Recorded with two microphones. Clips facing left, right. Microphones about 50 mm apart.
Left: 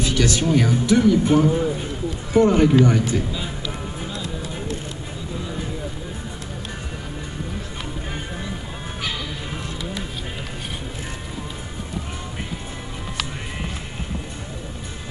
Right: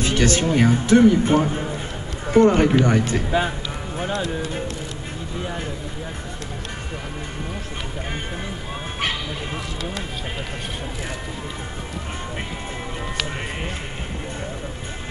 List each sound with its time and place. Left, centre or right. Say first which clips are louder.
0.0 s music: right 1 dB; right
0.5 s a man's voice: right 2 dB; right
4.0 s music: right 10 dB; right